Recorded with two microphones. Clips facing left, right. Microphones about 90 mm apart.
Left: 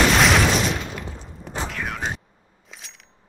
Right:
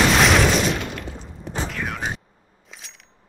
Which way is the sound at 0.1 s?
Centre (ahead or behind).